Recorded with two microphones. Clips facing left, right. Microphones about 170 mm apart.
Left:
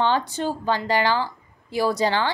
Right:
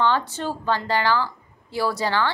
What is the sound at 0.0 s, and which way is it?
A woman's voice, 15° left (ahead or behind).